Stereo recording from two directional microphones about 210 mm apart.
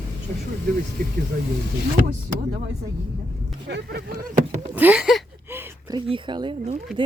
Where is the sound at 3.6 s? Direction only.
50° right (ahead or behind).